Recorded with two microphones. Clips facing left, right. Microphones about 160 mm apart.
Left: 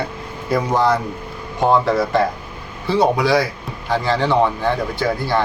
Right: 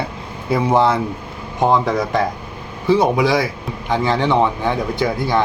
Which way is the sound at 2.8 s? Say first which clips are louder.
Right 1 dB; 20° right (ahead or behind).